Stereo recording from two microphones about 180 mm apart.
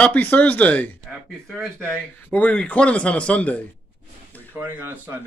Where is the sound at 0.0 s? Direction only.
10° left (ahead or behind).